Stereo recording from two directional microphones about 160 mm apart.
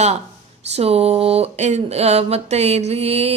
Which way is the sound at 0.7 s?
40° right (ahead or behind).